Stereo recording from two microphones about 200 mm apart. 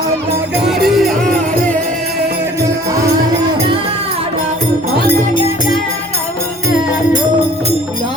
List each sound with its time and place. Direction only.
0.9 s music: centre (ahead or behind)